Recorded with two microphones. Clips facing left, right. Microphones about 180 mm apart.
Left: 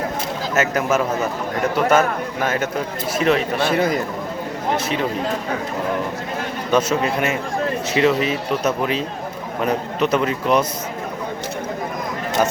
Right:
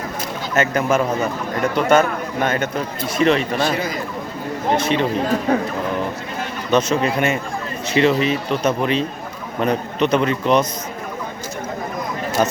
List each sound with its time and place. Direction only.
0.5 s a man's voice: 5° left (ahead or behind)
3.6 s a man's voice: 60° left (ahead or behind)
6.7 s a man's voice: 10° left (ahead or behind)